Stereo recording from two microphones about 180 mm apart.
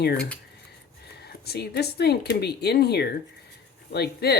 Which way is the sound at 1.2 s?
65° left (ahead or behind).